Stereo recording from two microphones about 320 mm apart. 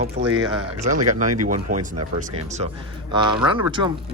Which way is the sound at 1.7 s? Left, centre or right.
Right.